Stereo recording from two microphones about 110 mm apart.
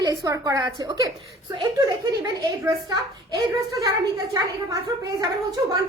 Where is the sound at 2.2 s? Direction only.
30° right (ahead or behind).